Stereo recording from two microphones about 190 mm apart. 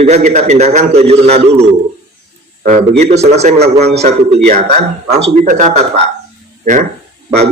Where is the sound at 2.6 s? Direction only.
40° right (ahead or behind).